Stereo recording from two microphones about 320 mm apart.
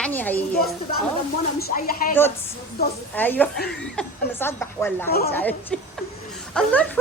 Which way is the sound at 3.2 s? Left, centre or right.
Centre.